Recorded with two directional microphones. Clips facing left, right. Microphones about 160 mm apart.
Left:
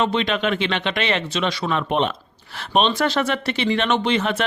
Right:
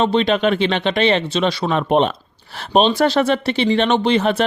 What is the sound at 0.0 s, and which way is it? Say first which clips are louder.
Speech: right 5 dB; 35° right (ahead or behind).